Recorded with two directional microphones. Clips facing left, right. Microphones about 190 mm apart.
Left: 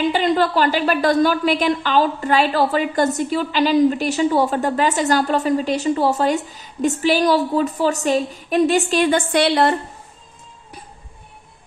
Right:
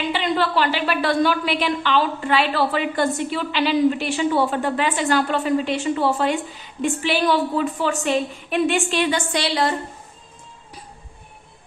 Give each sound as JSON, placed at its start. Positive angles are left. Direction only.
{"t": 0.1, "sound": "a woman's voice", "side_deg": 45}